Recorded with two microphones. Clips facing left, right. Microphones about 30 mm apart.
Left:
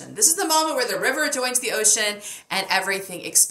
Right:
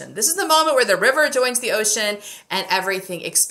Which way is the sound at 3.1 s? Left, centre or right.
Centre.